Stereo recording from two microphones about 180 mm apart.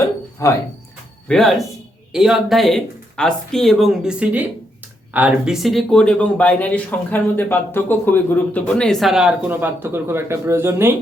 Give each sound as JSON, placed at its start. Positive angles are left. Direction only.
{"t": 0.4, "sound": "speech", "side_deg": 15}
{"t": 1.3, "sound": "speech", "side_deg": 0}